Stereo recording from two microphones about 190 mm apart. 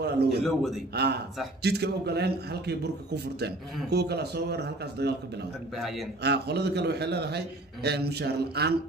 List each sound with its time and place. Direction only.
0.0 s a man's voice: 60° right (ahead or behind)
5.8 s a man's voice: centre (ahead or behind)
6.2 s a man's voice: 60° right (ahead or behind)